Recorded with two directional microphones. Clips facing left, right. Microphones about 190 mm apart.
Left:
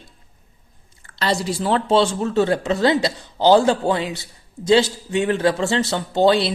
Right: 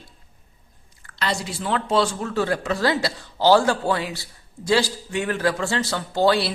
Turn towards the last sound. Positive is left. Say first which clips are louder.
# left 3 dB
turn(degrees=20)  # may be behind; listen again after turning